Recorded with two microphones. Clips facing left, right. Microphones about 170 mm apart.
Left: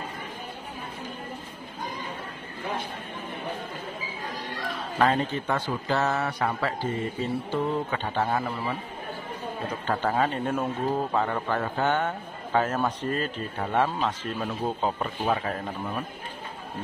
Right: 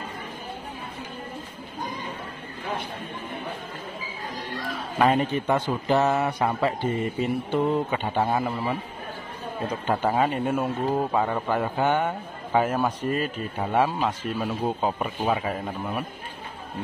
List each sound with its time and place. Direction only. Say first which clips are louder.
4.9 s a man's voice: right 3 dB; 15° right (ahead or behind)
9.8 s a man's voice: right 2 dB; 15° right (ahead or behind)